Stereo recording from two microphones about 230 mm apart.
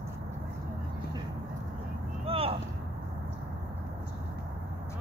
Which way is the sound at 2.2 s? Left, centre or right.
Right.